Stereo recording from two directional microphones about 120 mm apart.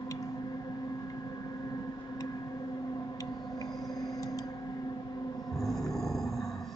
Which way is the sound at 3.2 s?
35° left (ahead or behind).